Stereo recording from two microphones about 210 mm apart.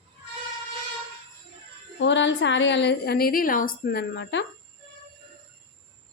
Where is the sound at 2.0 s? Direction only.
60° left (ahead or behind).